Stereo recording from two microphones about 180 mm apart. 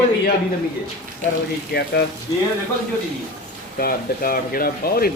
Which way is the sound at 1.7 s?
65° left (ahead or behind).